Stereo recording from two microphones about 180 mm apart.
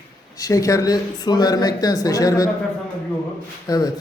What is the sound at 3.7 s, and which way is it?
Speech, 20° left (ahead or behind).